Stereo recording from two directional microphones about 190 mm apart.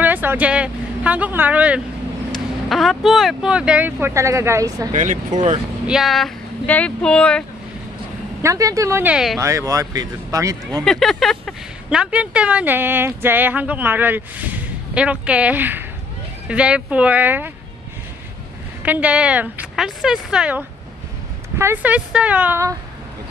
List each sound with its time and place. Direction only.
0.0 s speech: 10° right (ahead or behind)
4.9 s speech: 40° right (ahead or behind)
5.9 s speech: centre (ahead or behind)
8.4 s speech: 15° right (ahead or behind)
9.4 s speech: 15° right (ahead or behind)
10.8 s speech: centre (ahead or behind)
18.8 s speech: 10° right (ahead or behind)